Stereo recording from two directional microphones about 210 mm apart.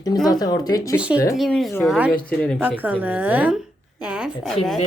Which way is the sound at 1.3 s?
Centre (ahead or behind).